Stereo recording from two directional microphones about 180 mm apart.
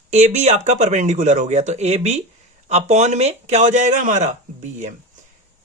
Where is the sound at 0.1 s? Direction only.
40° right (ahead or behind).